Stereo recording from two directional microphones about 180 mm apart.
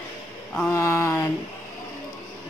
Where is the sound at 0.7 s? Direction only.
15° left (ahead or behind).